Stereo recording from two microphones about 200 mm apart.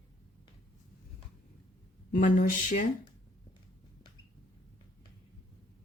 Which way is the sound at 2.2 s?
40° left (ahead or behind).